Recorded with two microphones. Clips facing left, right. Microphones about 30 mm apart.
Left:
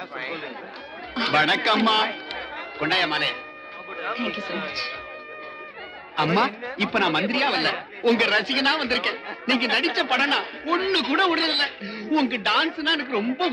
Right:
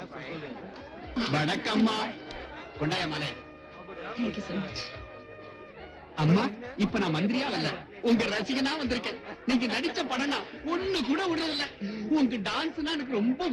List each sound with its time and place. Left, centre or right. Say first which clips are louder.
1.1 s a man's voice: left 8 dB; left
6.1 s speech: left 5 dB; left